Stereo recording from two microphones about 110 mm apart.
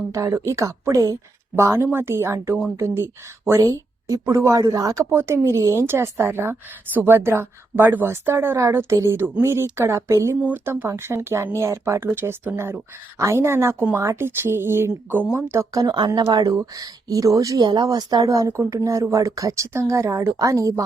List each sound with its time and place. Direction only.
0.1 s a woman's voice: 30° right (ahead or behind)
10.4 s a woman's voice: 15° right (ahead or behind)
15.5 s a woman's voice: 35° right (ahead or behind)